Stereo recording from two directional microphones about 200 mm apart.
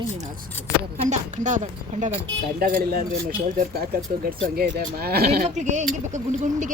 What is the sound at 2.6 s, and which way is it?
Speech, 50° right (ahead or behind).